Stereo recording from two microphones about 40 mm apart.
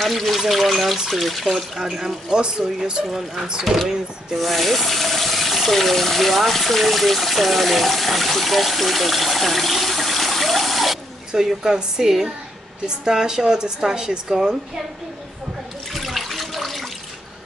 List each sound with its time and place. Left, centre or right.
0.0 s speech: centre; by 3.0 s right
3.1 s speech: centre
11.3 s speech: centre
15.9 s toilet flush: centre